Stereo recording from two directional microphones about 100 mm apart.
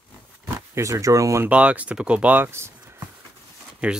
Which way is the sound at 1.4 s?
15° right (ahead or behind).